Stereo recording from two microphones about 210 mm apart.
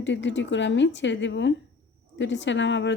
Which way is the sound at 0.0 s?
60° left (ahead or behind).